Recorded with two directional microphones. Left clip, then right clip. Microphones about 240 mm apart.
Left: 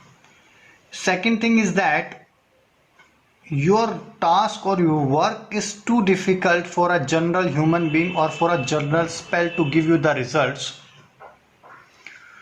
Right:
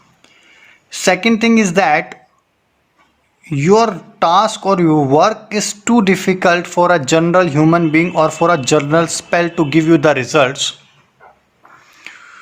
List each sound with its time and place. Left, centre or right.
0.9 s speech: right
3.5 s speech: right
12.1 s a sound: right